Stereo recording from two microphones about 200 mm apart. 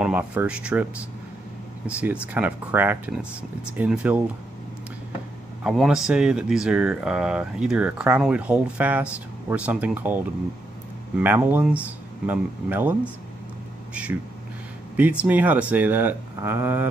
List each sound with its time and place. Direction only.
0.0 s speech: 5° right (ahead or behind)
1.9 s speech: 5° right (ahead or behind)
5.6 s speech: centre (ahead or behind)